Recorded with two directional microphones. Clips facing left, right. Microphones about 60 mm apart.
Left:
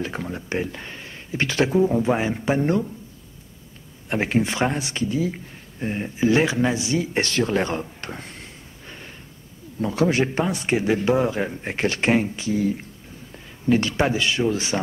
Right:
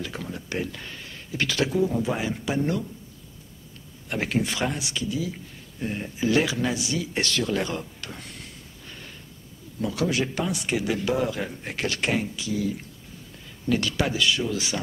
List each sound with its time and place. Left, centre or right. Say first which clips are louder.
0.0 s speech: left 5 dB; left
4.1 s speech: left 4 dB; left